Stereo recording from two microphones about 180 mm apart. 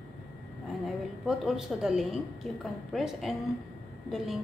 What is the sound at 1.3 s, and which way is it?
A woman's voice, centre (ahead or behind).